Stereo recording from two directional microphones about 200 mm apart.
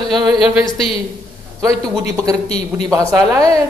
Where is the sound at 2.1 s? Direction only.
15° right (ahead or behind).